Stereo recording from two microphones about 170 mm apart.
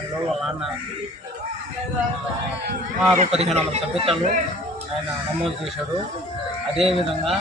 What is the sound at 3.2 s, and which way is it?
A man's voice, 40° right (ahead or behind).